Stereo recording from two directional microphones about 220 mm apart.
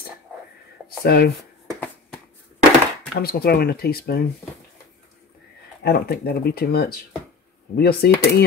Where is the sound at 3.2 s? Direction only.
45° left (ahead or behind).